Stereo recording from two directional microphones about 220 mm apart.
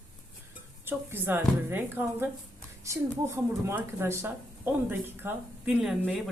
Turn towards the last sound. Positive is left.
turn(degrees=0)  # may be behind; listen again after turning